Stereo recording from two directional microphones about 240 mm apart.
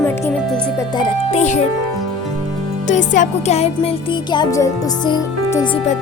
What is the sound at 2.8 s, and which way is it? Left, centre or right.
Speech, left.